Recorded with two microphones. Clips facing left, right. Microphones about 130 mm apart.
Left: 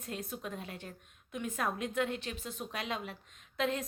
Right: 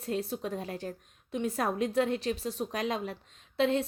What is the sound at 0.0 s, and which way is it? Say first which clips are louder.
A woman's voice: right 8 dB; 35° right (ahead or behind).